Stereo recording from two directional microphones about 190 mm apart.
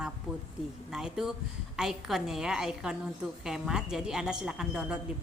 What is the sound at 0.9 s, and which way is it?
Speech, 5° right (ahead or behind).